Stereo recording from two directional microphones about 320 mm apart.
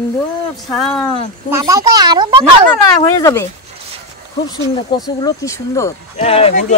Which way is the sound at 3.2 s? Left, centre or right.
Centre.